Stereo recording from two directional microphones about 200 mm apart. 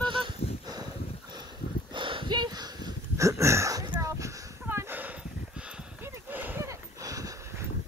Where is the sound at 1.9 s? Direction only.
25° right (ahead or behind); by 5.1 s 10° right (ahead or behind).